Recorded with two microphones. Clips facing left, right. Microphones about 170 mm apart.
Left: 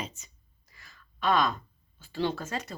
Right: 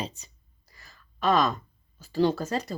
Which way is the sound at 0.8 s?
40° right (ahead or behind).